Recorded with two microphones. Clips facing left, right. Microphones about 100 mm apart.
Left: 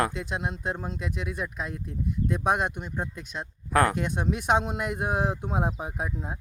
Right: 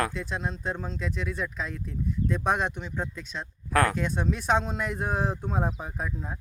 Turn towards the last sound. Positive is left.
turn(degrees=20)  # may be behind; listen again after turning